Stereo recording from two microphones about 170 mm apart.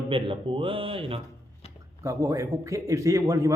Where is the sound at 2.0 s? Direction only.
20° right (ahead or behind).